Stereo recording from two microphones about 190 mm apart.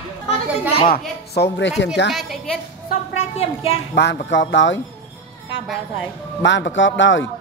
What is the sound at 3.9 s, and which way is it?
Speech, 65° left (ahead or behind).